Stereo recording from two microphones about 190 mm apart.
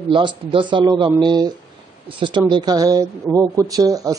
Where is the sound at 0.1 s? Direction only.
25° right (ahead or behind).